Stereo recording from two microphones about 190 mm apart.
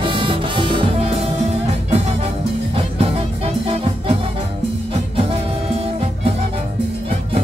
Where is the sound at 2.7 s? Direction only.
30° right (ahead or behind).